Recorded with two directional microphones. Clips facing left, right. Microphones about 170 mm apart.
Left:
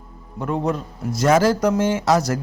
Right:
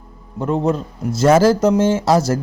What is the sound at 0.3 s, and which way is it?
A man's voice, 30° right (ahead or behind).